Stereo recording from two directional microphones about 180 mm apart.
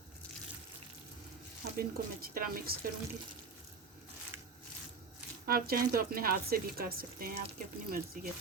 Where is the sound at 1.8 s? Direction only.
55° right (ahead or behind).